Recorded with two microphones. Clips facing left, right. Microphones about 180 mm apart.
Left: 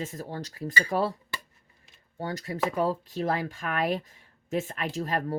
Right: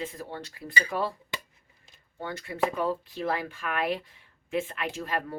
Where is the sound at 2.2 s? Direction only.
40° left (ahead or behind).